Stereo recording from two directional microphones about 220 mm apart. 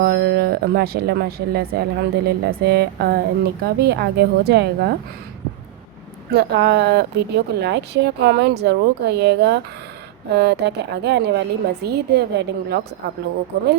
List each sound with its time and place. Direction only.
0.0 s speech: 50° right (ahead or behind)
6.3 s speech: 50° right (ahead or behind)